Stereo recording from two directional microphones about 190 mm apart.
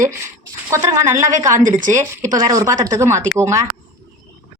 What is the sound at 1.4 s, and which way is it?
Speech, 15° right (ahead or behind).